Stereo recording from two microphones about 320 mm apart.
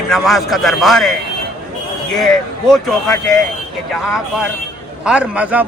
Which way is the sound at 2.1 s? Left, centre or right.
Centre.